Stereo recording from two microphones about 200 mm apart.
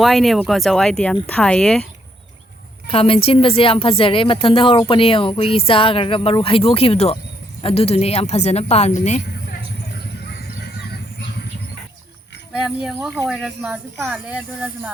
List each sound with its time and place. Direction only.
0.0 s speech: centre (ahead or behind)
2.8 s a woman's voice: 30° left (ahead or behind)
12.5 s speech: centre (ahead or behind)